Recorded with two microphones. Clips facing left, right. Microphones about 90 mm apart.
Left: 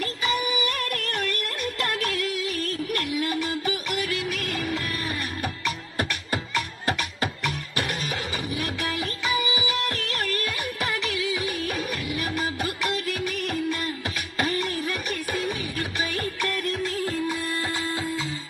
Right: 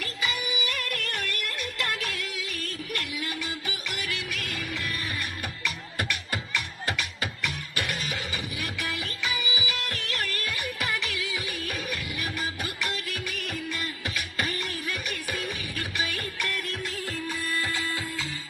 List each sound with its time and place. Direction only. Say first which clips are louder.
0.0 s music: left 6 dB; 40° left (ahead or behind)
17.2 s music: left 3 dB; 20° left (ahead or behind)